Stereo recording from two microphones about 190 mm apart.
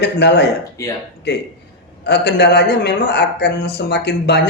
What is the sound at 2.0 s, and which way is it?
A man's voice, 60° left (ahead or behind).